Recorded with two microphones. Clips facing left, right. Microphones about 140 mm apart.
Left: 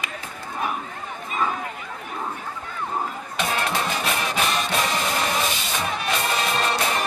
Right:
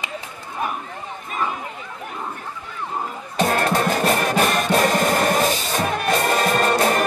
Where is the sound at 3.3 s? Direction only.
45° right (ahead or behind).